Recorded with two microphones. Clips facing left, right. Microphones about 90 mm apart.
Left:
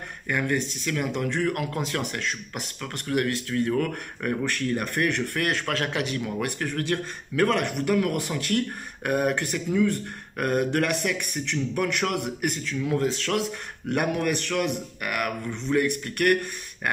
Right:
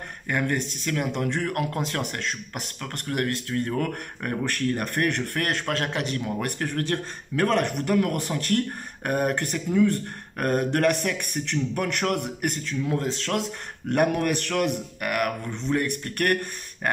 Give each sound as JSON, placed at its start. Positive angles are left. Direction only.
{"t": 0.3, "sound": "speech", "side_deg": -40}
{"t": 12.9, "sound": "speech", "side_deg": -30}
{"t": 13.8, "sound": "speech", "side_deg": -40}